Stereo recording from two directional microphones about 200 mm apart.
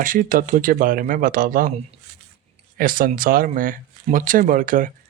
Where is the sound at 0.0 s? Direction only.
45° right (ahead or behind).